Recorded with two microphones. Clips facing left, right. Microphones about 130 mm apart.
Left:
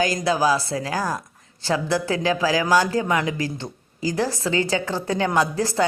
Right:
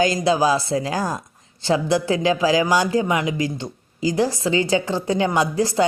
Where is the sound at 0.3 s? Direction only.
20° right (ahead or behind).